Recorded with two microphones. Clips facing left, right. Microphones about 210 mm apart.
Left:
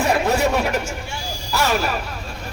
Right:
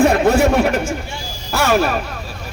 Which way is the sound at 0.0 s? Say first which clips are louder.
Right 6 dB; 50° right (ahead or behind).